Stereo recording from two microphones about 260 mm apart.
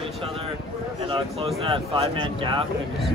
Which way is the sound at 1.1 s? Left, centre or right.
Centre.